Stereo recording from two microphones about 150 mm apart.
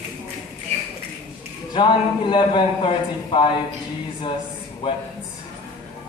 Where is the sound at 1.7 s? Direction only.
30° left (ahead or behind).